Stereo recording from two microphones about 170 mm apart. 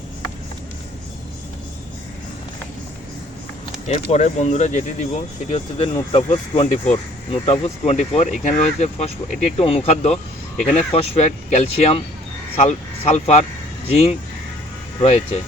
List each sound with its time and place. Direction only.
3.8 s speech: 40° left (ahead or behind)